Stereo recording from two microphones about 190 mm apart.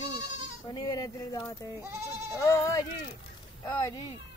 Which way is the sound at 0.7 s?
20° left (ahead or behind).